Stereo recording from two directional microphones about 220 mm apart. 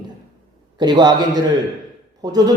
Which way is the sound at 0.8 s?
20° right (ahead or behind).